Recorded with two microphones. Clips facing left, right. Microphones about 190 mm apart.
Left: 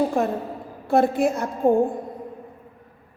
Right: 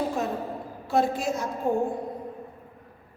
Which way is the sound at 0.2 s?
55° left (ahead or behind).